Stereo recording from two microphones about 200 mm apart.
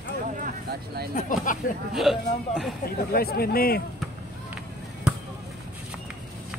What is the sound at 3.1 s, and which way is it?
Speech, 50° left (ahead or behind).